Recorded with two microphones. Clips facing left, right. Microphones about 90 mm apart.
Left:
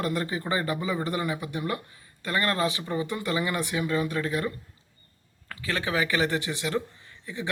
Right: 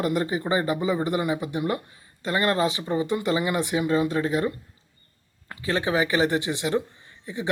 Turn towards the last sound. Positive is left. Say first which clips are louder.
# right 3 dB
turn(degrees=-20)  # may be behind; listen again after turning